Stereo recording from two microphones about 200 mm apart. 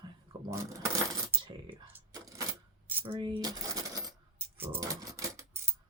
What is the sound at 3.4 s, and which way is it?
Coin, 20° right (ahead or behind).